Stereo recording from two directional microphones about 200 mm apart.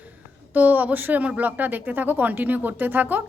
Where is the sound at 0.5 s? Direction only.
10° right (ahead or behind).